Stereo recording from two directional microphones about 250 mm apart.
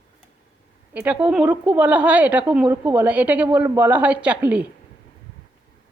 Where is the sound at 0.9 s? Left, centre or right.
Centre.